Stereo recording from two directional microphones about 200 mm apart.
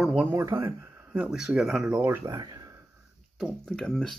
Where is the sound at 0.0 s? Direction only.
5° right (ahead or behind); by 2.7 s 20° right (ahead or behind).